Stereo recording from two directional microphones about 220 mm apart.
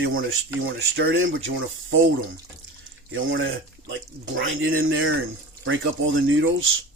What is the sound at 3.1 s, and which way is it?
Speech, 60° right (ahead or behind).